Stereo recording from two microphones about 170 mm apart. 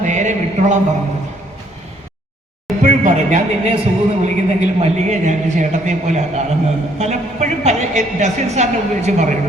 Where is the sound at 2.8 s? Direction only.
50° right (ahead or behind).